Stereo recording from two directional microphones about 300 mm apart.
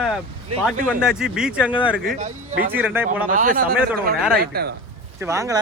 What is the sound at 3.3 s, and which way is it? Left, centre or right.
Speech, right.